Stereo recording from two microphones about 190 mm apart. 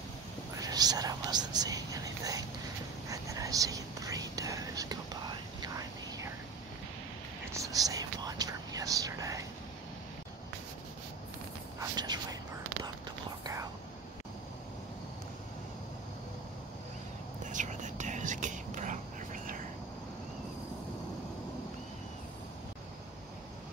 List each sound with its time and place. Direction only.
0.6 s whispering: 20° right (ahead or behind)
7.5 s whispering: 15° right (ahead or behind)
11.8 s whispering: 20° right (ahead or behind)
17.5 s whispering: 40° right (ahead or behind)